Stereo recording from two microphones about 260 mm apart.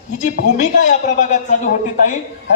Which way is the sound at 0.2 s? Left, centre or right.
Left.